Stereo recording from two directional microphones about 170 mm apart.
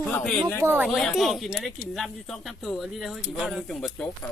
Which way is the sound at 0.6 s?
10° right (ahead or behind).